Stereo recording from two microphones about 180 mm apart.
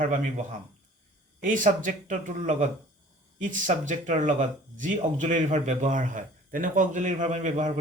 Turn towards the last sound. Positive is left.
turn(degrees=-40)  # may be behind; listen again after turning